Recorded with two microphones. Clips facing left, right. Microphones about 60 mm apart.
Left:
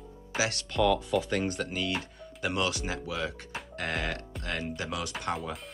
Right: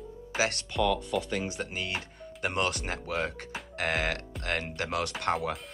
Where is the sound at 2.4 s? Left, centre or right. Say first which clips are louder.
Even; right.